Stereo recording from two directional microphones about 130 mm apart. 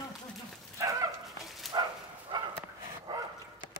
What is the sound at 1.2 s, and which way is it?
Dog, centre (ahead or behind).